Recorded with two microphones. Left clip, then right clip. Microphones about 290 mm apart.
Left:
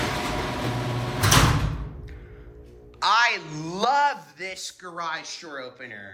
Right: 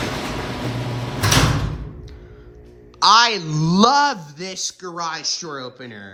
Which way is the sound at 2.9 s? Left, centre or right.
Centre.